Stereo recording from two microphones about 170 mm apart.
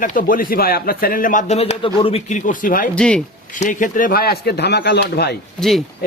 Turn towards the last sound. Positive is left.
turn(degrees=0)  # may be behind; listen again after turning